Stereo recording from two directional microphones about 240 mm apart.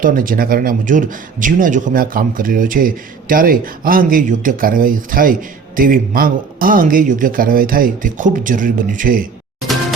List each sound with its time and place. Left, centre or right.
0.0 s speech: right